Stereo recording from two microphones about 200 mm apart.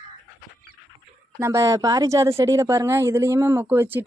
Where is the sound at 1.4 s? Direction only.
15° right (ahead or behind).